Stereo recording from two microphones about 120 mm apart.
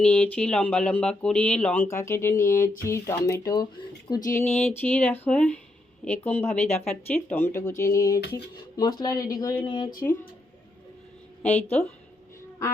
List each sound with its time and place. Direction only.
0.0 s speech: 10° left (ahead or behind)
1.8 s speech: 25° left (ahead or behind)
4.4 s speech: 15° left (ahead or behind); by 9.9 s 40° left (ahead or behind)
11.4 s speech: 15° left (ahead or behind)